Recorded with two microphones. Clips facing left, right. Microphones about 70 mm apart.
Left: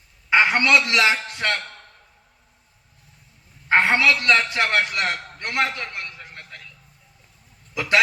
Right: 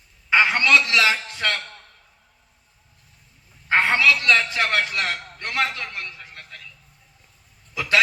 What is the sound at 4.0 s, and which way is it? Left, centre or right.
Speech, left.